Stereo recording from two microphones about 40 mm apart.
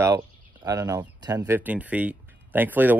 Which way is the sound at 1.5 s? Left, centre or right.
Right.